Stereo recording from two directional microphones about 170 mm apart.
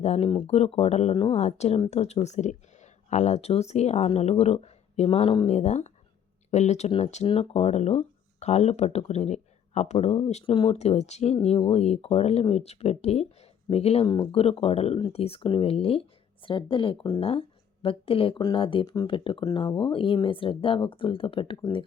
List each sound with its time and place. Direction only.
0.0 s speech: 35° left (ahead or behind)